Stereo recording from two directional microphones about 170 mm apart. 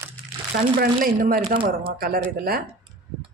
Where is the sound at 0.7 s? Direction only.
55° right (ahead or behind).